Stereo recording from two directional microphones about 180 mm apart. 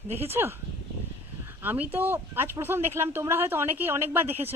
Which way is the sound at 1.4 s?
10° right (ahead or behind).